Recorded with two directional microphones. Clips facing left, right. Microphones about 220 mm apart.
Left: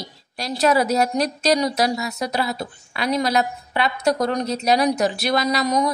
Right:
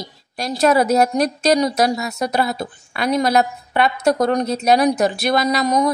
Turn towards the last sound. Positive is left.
turn(degrees=-50)  # may be behind; listen again after turning